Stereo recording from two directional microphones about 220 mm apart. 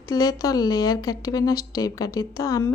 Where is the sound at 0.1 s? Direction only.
15° left (ahead or behind).